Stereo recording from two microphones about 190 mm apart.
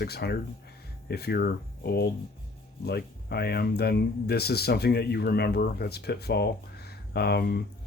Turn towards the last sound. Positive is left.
turn(degrees=55)  # may be behind; listen again after turning